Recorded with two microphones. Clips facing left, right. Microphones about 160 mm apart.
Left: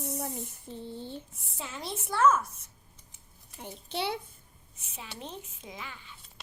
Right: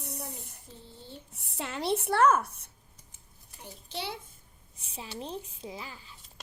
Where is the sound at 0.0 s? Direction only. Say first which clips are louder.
Left 6 dB; 65° left (ahead or behind).